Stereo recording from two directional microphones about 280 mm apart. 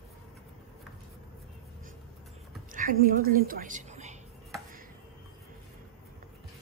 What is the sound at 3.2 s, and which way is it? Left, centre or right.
Speech, right.